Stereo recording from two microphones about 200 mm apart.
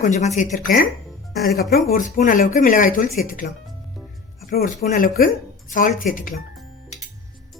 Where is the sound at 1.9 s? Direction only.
45° left (ahead or behind).